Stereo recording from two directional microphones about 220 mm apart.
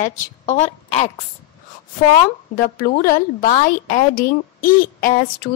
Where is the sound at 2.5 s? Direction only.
40° left (ahead or behind).